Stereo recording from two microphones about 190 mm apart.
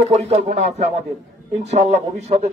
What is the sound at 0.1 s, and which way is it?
Speech, 35° right (ahead or behind).